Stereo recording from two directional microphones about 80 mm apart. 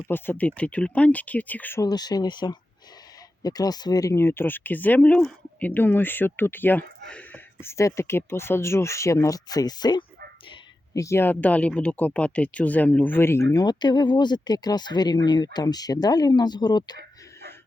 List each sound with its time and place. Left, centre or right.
0.0 s speech: left
1.8 s speech: left
3.4 s speech: left
4.1 s speech: left
7.1 s whispering: centre
7.6 s speech: left
10.9 s speech: left
11.2 s speech: left
13.5 s speech: left